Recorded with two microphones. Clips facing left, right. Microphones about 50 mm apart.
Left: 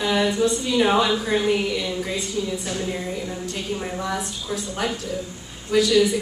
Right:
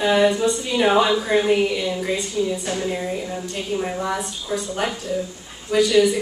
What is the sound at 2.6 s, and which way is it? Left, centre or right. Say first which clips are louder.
A woman's voice: right 3 dB; centre.